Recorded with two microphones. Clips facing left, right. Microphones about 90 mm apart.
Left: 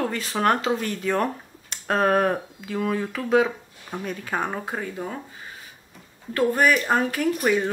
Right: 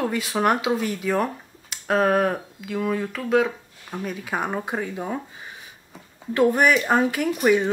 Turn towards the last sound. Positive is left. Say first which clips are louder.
# right 2 dB
turn(degrees=-15)  # may be behind; listen again after turning